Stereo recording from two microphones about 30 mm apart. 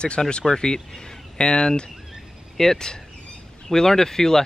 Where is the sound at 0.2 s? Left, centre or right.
Centre.